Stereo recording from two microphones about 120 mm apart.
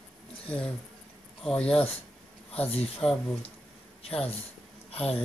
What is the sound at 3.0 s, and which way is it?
Music, 10° left (ahead or behind).